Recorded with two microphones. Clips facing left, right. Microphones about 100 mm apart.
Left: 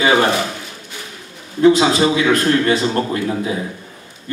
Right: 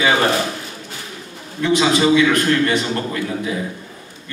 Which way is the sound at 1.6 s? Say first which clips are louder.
Left 4 dB; 35° left (ahead or behind).